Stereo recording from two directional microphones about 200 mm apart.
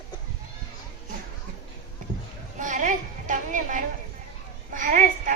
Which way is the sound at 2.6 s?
40° right (ahead or behind).